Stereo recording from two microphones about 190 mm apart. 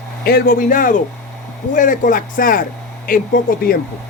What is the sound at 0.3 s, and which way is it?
Speech, 50° left (ahead or behind).